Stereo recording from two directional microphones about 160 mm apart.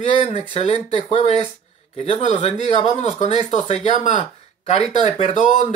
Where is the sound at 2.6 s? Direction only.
40° left (ahead or behind).